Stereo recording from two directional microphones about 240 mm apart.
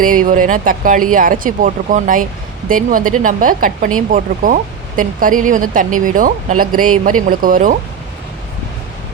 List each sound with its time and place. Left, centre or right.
0.0 s speech: right